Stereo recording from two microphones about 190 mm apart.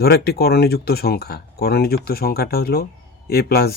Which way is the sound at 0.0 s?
55° left (ahead or behind).